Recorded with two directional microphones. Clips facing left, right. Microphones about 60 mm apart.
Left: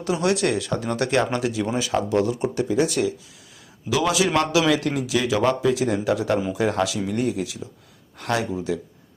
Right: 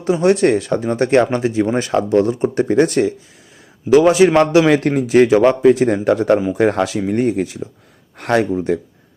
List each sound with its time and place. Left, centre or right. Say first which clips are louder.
0.0 s speech: right 8 dB; right
1.7 s speech: right 6 dB; right
2.0 s speech: right 7 dB; right
2.6 s speech: right 7 dB; right
2.9 s speech: right 7 dB; right
8.2 s speech: right 8 dB; right